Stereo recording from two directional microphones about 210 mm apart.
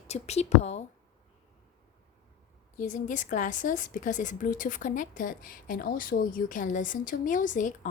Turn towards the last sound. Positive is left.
turn(degrees=35)  # may be behind; listen again after turning